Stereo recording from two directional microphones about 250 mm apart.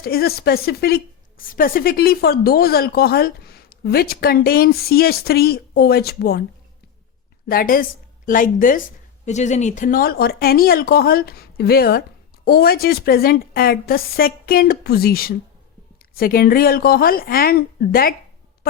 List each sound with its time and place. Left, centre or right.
0.0 s a woman's voice: left
7.4 s a woman's voice: left